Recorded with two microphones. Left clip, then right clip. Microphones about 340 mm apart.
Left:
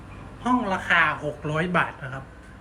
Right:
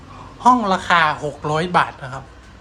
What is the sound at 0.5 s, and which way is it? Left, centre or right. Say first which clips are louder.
Speech: right 6 dB; right.